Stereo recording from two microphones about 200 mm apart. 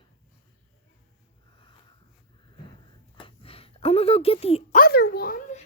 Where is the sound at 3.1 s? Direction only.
25° left (ahead or behind).